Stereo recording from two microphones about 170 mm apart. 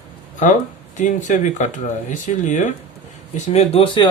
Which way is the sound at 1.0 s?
50° left (ahead or behind).